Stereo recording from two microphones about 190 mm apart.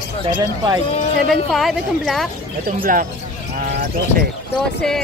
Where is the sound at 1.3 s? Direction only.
Centre (ahead or behind).